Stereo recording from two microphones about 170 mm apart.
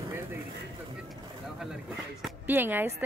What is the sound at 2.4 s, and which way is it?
Speech, 10° right (ahead or behind).